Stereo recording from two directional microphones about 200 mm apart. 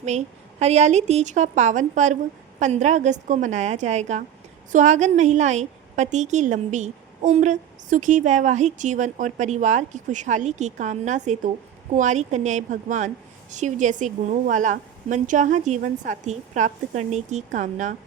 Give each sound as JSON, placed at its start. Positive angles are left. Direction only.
{"t": 0.0, "sound": "a woman's voice", "side_deg": -35}